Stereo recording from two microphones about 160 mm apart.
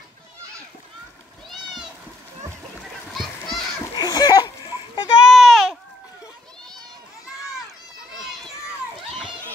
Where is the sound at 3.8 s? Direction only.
25° left (ahead or behind).